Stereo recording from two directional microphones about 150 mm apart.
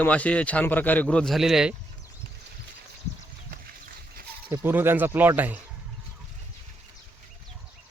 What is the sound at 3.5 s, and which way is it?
Livestock, 75° right (ahead or behind).